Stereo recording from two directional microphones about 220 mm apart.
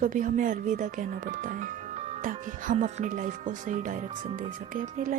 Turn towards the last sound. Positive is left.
turn(degrees=-35)  # may be behind; listen again after turning